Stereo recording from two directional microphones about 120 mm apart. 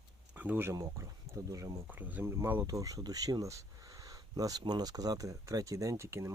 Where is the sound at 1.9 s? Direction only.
15° right (ahead or behind).